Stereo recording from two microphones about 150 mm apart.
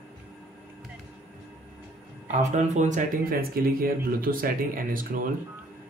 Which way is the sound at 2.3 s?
50° right (ahead or behind).